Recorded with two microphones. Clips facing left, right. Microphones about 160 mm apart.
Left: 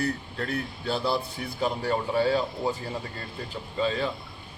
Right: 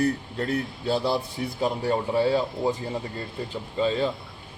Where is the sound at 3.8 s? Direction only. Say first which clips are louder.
Right 3 dB; 30° right (ahead or behind).